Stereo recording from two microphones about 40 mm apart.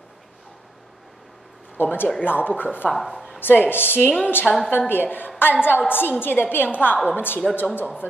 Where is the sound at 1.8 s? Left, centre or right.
Left.